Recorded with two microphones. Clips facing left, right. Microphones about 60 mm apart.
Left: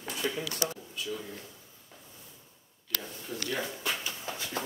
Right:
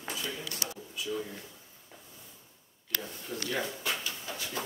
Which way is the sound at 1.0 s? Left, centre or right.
Centre.